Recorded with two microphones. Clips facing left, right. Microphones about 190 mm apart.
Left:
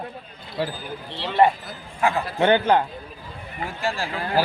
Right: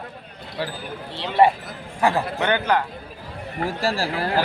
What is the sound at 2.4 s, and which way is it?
Speech, 25° left (ahead or behind).